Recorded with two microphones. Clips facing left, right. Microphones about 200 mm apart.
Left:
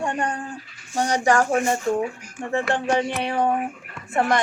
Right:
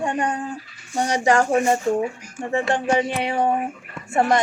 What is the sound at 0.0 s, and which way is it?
Speech, 20° right (ahead or behind).